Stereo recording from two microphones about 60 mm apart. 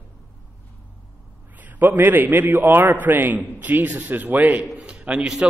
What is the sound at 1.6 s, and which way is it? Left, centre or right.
A man's voice, right.